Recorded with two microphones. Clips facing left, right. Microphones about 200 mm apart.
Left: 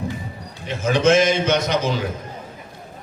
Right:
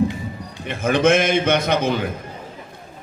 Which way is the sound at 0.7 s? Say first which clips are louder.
Even; 55° right (ahead or behind).